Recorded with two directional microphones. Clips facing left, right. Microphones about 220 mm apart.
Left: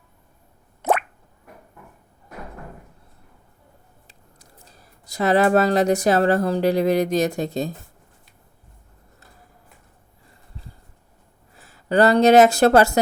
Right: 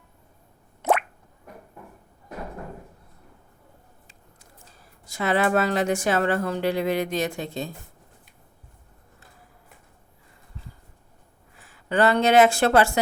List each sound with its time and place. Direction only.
4.0 s speech: 40° left (ahead or behind)
11.5 s speech: 40° left (ahead or behind)